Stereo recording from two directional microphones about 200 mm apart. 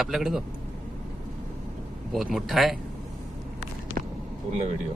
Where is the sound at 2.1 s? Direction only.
Centre (ahead or behind).